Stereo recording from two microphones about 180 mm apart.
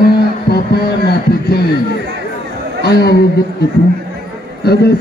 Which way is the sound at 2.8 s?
60° left (ahead or behind).